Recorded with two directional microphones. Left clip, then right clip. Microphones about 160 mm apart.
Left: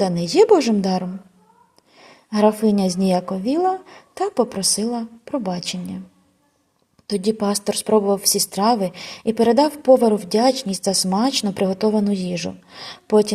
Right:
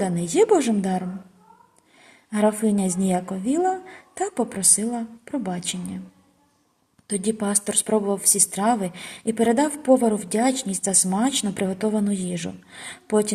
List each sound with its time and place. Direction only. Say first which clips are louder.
0.0 s a woman's voice: left 5 dB; 30° left (ahead or behind)
2.3 s a woman's voice: left 5 dB; 25° left (ahead or behind)
7.1 s a woman's voice: left 5 dB; 25° left (ahead or behind)